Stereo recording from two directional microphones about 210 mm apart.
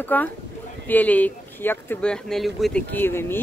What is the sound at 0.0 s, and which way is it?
Speech, 10° left (ahead or behind).